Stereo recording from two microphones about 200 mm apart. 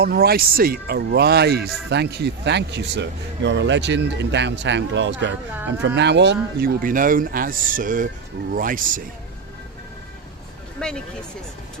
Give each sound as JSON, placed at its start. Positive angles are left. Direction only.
{"t": 0.0, "sound": "speech", "side_deg": -50}
{"t": 6.8, "sound": "speech", "side_deg": -45}
{"t": 10.8, "sound": "a sound", "side_deg": 5}